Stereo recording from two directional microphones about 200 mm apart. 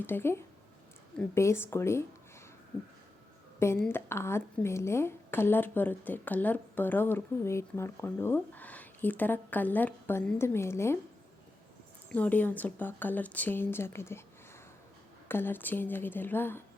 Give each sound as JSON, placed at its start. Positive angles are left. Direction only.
{"t": 0.0, "sound": "a woman's voice", "side_deg": 10}
{"t": 3.8, "sound": "a woman's voice", "side_deg": 10}
{"t": 12.0, "sound": "a woman's voice", "side_deg": 10}
{"t": 15.3, "sound": "a woman's voice", "side_deg": 10}